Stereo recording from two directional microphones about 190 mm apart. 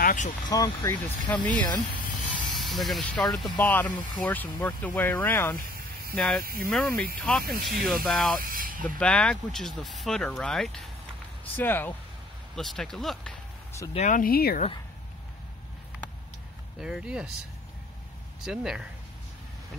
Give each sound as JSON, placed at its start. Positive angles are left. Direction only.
{"t": 0.0, "sound": "vehicle", "side_deg": 45}
{"t": 0.5, "sound": "speech", "side_deg": 15}
{"t": 2.5, "sound": "speech", "side_deg": 0}
{"t": 8.4, "sound": "a sound", "side_deg": -50}
{"t": 8.8, "sound": "speech", "side_deg": 5}
{"t": 13.9, "sound": "speech", "side_deg": 45}
{"t": 16.8, "sound": "speech", "side_deg": -5}
{"t": 18.4, "sound": "speech", "side_deg": -5}